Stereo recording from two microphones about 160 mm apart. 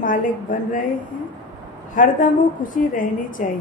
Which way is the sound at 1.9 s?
60° left (ahead or behind).